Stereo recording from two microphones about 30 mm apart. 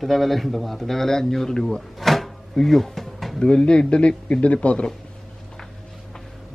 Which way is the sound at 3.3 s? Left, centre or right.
Left.